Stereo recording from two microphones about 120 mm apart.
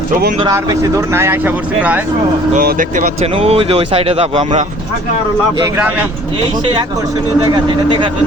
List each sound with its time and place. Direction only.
0.5 s speech: 25° right (ahead or behind)
2.7 s speech: 90° right
3.3 s speech: 55° right (ahead or behind)
5.7 s speech: 15° right (ahead or behind)